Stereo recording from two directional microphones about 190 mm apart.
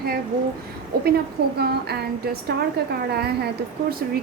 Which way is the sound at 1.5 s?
55° right (ahead or behind).